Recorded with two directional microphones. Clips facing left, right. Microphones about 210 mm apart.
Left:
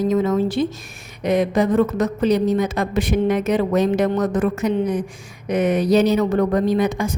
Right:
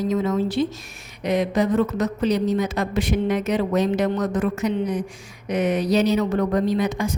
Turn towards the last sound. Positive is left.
turn(degrees=50)  # may be behind; listen again after turning